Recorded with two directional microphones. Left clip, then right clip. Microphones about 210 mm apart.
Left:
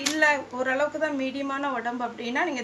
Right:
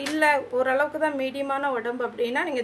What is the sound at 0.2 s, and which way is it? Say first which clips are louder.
A woman's voice: right 3 dB; 60° right (ahead or behind).